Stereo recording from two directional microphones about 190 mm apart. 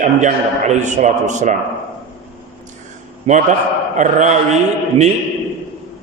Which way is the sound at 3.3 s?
35° right (ahead or behind).